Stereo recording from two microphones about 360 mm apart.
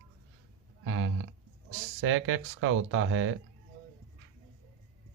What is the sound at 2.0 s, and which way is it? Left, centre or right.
Speech, right.